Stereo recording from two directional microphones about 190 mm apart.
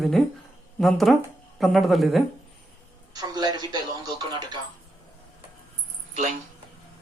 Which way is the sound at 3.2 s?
20° right (ahead or behind).